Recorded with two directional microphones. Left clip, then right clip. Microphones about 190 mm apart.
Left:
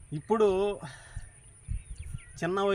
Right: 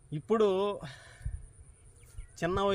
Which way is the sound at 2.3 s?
30° right (ahead or behind).